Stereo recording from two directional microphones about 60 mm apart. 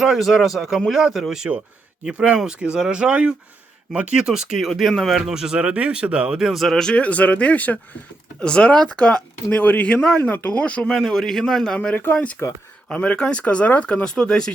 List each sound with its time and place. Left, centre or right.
0.0 s speech: centre
1.5 s speech: right
2.0 s speech: right
6.6 s speech: centre
7.0 s speech: left
10.9 s speech: centre
12.1 s speech: left